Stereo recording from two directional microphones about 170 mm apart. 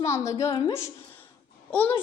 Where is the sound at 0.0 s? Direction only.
15° left (ahead or behind).